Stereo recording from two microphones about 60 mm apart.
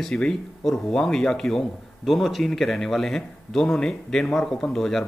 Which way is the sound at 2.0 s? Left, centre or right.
Centre.